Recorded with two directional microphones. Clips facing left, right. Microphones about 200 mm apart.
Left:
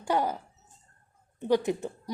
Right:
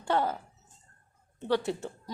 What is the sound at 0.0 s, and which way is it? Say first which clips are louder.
Speech: left 1 dB; 15° left (ahead or behind).